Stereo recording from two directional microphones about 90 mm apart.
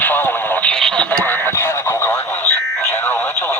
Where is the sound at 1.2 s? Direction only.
25° left (ahead or behind).